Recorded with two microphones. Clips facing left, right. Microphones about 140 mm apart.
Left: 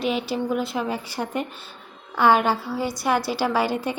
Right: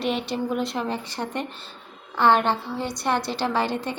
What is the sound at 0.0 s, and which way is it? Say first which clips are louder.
A woman's voice: left 1 dB; centre (ahead or behind).